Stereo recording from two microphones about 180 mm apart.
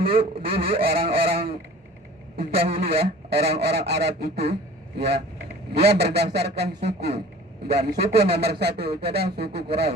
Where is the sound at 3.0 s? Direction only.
65° right (ahead or behind).